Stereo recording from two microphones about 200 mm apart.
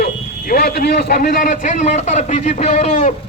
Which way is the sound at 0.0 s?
50° left (ahead or behind).